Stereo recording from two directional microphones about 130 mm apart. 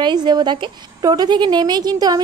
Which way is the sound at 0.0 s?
35° right (ahead or behind).